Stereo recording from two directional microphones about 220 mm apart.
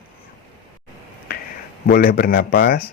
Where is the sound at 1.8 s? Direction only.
45° left (ahead or behind).